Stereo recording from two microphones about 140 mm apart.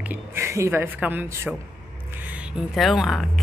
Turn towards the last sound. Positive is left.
turn(degrees=0)  # may be behind; listen again after turning